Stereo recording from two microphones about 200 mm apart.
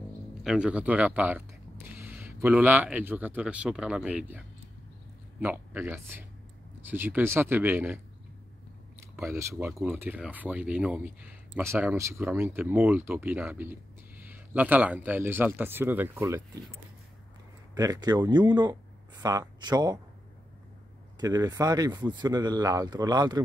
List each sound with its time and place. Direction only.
0.4 s speech: 5° right (ahead or behind)
9.1 s speech: 15° right (ahead or behind)
17.7 s speech: 20° right (ahead or behind)
21.2 s speech: 20° right (ahead or behind)